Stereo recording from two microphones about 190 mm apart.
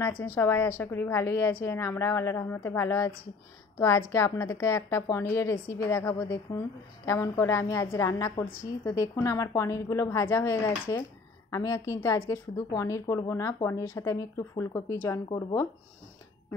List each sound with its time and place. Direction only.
0.0 s a woman's voice: 15° left (ahead or behind)
4.1 s a woman's voice: 15° left (ahead or behind)